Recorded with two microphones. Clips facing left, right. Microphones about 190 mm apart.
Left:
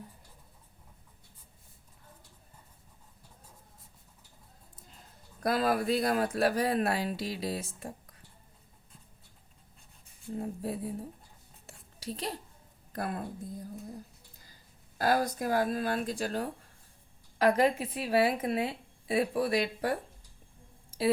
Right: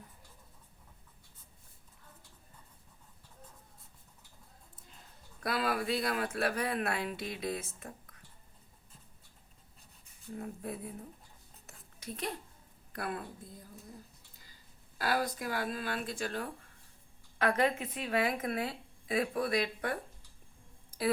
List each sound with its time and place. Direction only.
5.4 s a woman's voice: 40° left (ahead or behind)
10.3 s a woman's voice: 30° left (ahead or behind)
11.6 s a sound: 30° left (ahead or behind)
12.9 s speech: 40° left (ahead or behind)
14.9 s a woman's voice: 45° left (ahead or behind)